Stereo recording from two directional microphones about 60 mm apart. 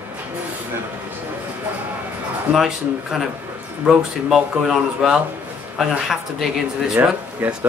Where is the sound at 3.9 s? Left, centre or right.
Centre.